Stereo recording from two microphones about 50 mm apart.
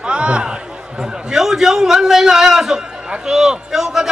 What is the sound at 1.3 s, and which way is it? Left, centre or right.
A man's voice, centre.